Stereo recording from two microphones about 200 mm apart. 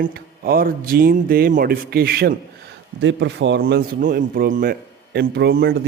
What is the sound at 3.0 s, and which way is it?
A man's voice, 65° right (ahead or behind).